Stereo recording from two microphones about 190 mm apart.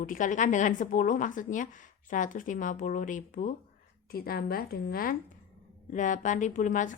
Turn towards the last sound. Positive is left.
turn(degrees=40)  # may be behind; listen again after turning